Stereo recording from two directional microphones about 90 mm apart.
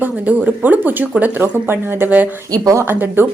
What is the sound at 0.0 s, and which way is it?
Speech, 15° right (ahead or behind).